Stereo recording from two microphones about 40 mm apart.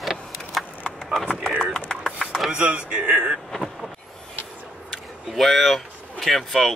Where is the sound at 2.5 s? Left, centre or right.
Right.